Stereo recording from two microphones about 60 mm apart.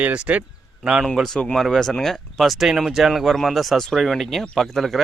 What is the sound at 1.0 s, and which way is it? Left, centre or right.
Speech, centre.